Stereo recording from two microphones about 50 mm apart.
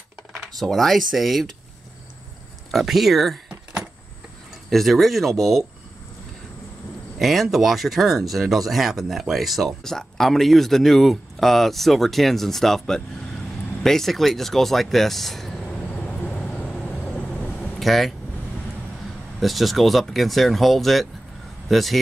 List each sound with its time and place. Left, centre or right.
0.3 s speech: centre
2.7 s speech: centre
4.6 s speech: centre
7.2 s speech: centre
15.6 s vehicle: left
16.4 s vehicle: centre
17.7 s speech: centre
19.4 s speech: centre